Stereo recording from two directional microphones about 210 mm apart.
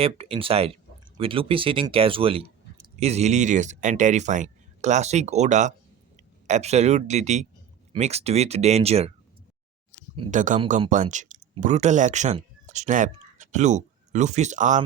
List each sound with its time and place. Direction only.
0.0 s speech: 25° right (ahead or behind)
10.3 s speech: 35° right (ahead or behind)